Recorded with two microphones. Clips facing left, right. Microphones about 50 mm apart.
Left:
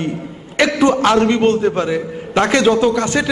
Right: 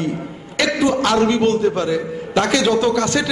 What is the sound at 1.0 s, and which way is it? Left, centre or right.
A man's voice, left.